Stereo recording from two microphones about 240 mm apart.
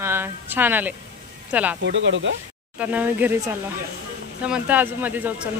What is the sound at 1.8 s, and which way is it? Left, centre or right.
Speech, right.